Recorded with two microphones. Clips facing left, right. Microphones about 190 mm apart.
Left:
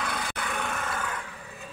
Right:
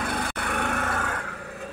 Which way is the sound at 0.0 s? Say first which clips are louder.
Right 4 dB; 55° right (ahead or behind).